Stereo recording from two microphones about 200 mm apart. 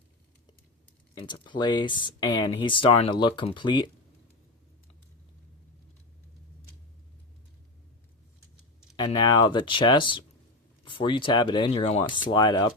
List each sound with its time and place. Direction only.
1.1 s speech: 25° left (ahead or behind)
9.1 s speech: 20° left (ahead or behind)